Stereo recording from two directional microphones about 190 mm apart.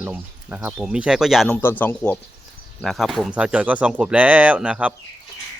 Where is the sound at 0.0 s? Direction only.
10° right (ahead or behind).